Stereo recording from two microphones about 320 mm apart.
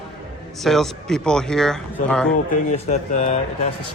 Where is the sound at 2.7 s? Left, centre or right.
Left.